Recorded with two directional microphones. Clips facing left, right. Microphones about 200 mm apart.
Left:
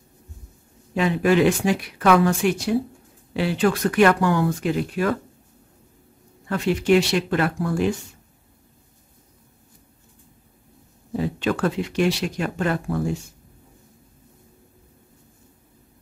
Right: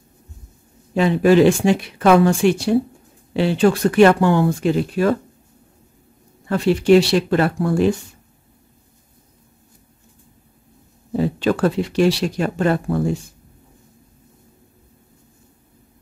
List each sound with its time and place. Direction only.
0.9 s speech: 30° right (ahead or behind)
6.5 s speech: 35° right (ahead or behind)
11.1 s speech: 35° right (ahead or behind)